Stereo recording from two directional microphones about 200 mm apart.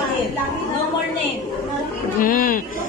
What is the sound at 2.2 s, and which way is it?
Speech, 45° left (ahead or behind).